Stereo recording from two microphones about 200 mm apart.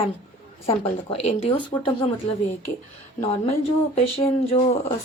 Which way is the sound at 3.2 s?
30° left (ahead or behind).